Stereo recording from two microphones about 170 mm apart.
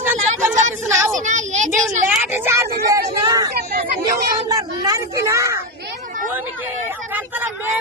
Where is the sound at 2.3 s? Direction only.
15° right (ahead or behind).